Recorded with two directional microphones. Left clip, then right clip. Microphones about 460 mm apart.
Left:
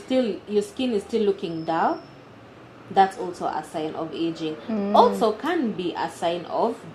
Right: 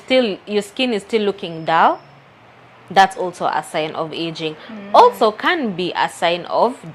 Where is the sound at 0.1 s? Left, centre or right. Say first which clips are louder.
Right 7 dB; right.